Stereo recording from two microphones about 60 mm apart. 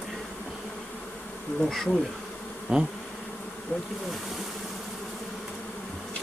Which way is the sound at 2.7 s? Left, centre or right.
Centre.